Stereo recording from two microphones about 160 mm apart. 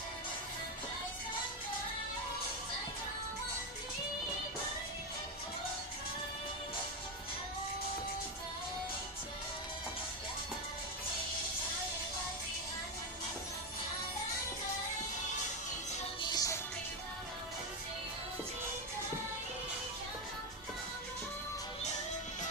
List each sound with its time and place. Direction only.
16.3 s music: 20° left (ahead or behind)